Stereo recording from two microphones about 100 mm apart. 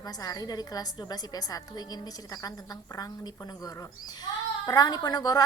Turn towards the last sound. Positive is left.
turn(degrees=40)  # may be behind; listen again after turning